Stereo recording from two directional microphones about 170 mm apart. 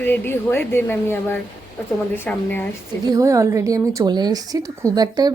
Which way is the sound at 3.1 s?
20° right (ahead or behind).